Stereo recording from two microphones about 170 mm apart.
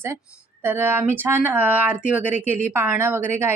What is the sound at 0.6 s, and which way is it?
A woman's voice, 10° right (ahead or behind).